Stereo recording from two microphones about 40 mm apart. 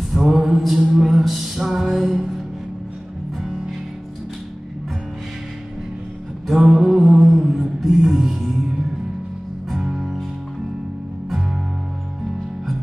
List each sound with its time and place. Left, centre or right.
0.1 s music: centre
6.4 s music: centre